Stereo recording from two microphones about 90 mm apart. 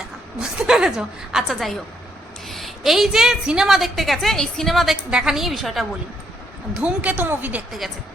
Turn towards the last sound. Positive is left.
turn(degrees=-20)  # may be behind; listen again after turning